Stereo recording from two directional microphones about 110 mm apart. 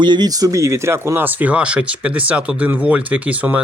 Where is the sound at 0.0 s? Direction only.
40° right (ahead or behind).